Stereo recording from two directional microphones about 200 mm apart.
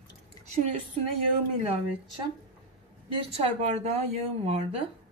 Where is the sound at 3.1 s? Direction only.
30° right (ahead or behind).